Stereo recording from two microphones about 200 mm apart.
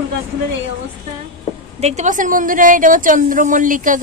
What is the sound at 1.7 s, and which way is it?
A woman's voice, 35° right (ahead or behind).